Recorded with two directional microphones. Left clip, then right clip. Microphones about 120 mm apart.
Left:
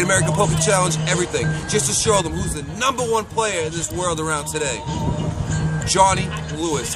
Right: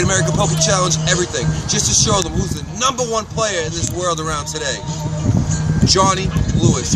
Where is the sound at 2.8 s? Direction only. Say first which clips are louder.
Right 2 dB; 25° left (ahead or behind).